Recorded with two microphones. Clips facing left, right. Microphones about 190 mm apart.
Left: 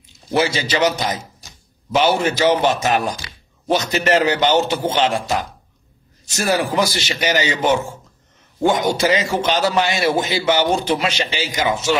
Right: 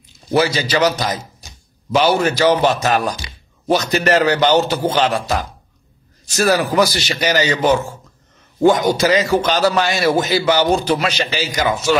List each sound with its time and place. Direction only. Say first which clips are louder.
0.4 s a man's voice: right 2 dB; 25° left (ahead or behind)
6.2 s a man's voice: right 3 dB; 20° left (ahead or behind)